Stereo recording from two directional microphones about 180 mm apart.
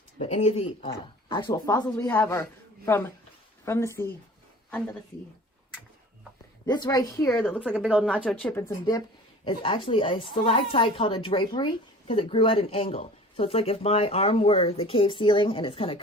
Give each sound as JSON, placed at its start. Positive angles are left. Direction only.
{"t": 0.2, "sound": "a woman's voice", "side_deg": 35}
{"t": 1.6, "sound": "a woman's voice", "side_deg": 15}
{"t": 6.7, "sound": "a woman's voice", "side_deg": 20}
{"t": 7.6, "sound": "speech", "side_deg": -5}
{"t": 8.1, "sound": "a woman's voice", "side_deg": 5}
{"t": 8.8, "sound": "a woman's voice", "side_deg": 25}